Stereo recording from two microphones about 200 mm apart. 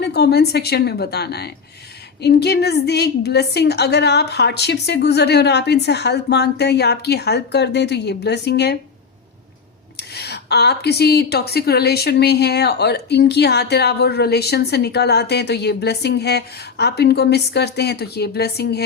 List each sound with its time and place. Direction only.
0.0 s a woman's voice: 55° left (ahead or behind)
10.0 s speech: 55° left (ahead or behind)